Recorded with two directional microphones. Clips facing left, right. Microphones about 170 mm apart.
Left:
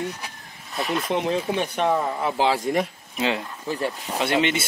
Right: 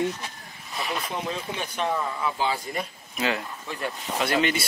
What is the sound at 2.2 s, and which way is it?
Speech, 80° left.